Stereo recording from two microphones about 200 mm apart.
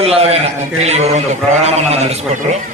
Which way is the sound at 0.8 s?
35° right (ahead or behind).